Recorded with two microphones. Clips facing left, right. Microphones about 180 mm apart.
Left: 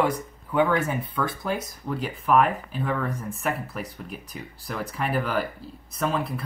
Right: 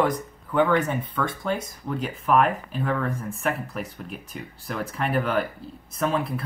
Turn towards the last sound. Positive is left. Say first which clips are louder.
# right 2 dB
turn(degrees=0)  # may be behind; listen again after turning